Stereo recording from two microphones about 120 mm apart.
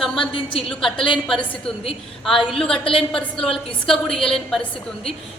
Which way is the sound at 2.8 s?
50° left (ahead or behind).